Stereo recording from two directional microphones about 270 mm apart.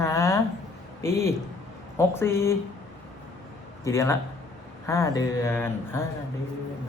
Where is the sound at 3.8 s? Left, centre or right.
Centre.